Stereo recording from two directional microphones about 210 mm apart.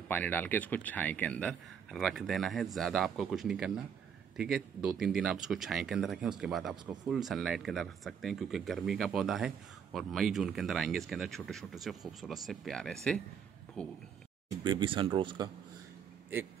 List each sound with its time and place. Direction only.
0.1 s speech: 10° left (ahead or behind)
14.6 s speech: 20° right (ahead or behind)